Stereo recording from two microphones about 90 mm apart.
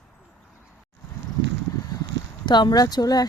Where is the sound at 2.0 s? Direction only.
55° left (ahead or behind).